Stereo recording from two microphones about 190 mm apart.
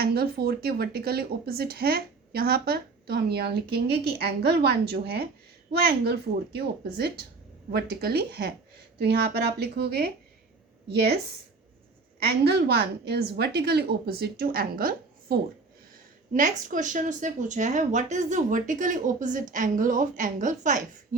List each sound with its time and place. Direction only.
0.0 s speech: 55° right (ahead or behind)
12.2 s speech: 55° right (ahead or behind); by 21.2 s 40° right (ahead or behind)